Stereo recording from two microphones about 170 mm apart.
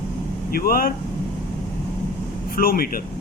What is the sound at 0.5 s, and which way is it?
Speech, 60° left (ahead or behind).